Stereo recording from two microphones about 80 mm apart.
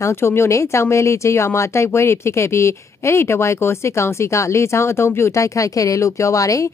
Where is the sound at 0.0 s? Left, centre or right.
Left.